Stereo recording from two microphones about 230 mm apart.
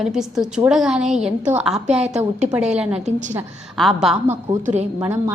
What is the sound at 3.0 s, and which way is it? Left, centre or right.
Speech, right.